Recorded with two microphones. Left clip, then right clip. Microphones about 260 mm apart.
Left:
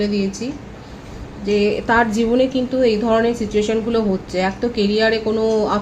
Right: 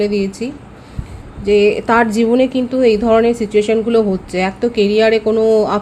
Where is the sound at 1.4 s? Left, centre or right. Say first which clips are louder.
Right 5 dB; right.